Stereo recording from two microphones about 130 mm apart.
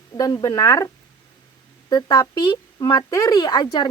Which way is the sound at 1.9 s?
30° left (ahead or behind).